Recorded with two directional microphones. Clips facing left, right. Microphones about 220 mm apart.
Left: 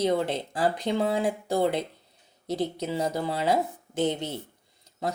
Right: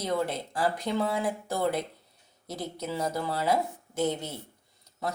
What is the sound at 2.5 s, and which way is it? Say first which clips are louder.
Speech: left 6 dB; 30° left (ahead or behind).